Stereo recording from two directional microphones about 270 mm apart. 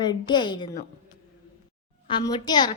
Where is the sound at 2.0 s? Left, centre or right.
Centre.